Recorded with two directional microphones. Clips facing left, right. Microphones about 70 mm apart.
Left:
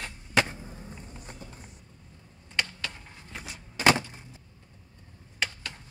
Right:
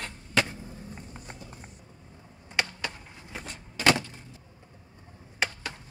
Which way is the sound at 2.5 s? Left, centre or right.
Centre.